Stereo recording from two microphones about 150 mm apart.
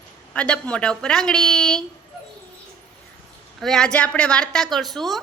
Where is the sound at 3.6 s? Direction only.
5° left (ahead or behind).